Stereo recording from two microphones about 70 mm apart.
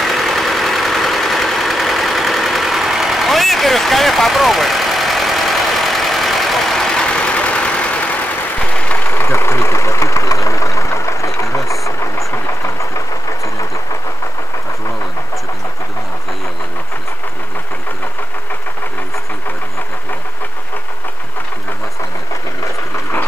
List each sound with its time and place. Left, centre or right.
0.0 s vehicle: centre
9.1 s vehicle: left